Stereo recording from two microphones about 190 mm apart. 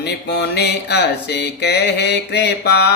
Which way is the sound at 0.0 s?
60° left (ahead or behind).